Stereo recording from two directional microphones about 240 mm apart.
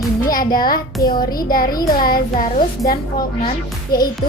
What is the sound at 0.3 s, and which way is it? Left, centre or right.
A child's voice, left.